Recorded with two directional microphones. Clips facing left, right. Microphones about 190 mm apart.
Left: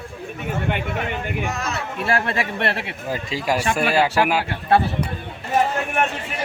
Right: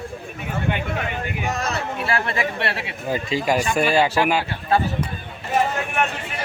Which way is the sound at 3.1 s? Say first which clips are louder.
Right 2 dB; centre (ahead or behind).